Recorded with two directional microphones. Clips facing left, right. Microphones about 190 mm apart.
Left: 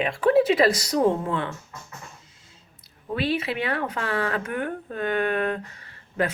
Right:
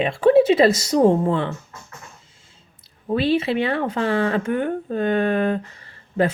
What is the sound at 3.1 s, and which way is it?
Speech, 30° right (ahead or behind).